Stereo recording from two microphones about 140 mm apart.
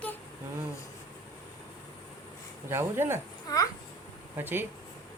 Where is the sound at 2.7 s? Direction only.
15° right (ahead or behind).